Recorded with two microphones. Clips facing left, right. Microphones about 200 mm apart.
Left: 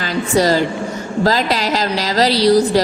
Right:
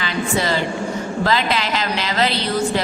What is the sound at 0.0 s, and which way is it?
A woman's voice, 40° left (ahead or behind).